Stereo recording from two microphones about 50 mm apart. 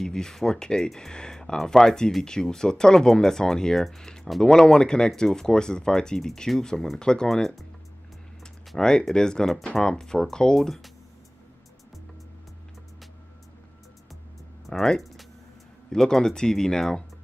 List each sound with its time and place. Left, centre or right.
0.0 s speech: centre
8.7 s speech: centre
14.7 s speech: centre